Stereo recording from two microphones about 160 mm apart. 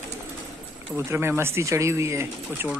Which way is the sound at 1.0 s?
15° right (ahead or behind).